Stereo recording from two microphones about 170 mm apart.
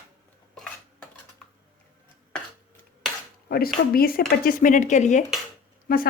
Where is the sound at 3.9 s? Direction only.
60° left (ahead or behind).